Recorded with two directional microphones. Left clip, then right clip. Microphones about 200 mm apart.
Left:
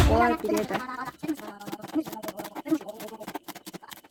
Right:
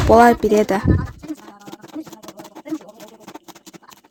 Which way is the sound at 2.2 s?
20° left (ahead or behind).